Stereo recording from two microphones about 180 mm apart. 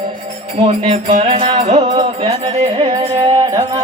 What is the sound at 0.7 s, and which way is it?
Music, 40° right (ahead or behind).